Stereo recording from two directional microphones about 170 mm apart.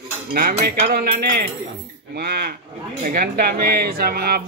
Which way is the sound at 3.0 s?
55° right (ahead or behind).